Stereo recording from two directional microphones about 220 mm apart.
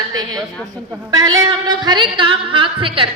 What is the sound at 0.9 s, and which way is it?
A woman's voice, 15° right (ahead or behind).